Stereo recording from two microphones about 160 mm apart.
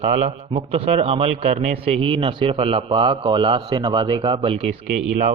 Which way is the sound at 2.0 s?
35° right (ahead or behind).